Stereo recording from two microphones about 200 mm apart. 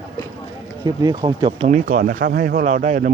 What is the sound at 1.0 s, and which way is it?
Speech, 20° right (ahead or behind).